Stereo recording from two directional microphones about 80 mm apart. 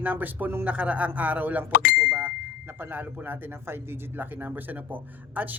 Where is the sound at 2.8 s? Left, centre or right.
Right.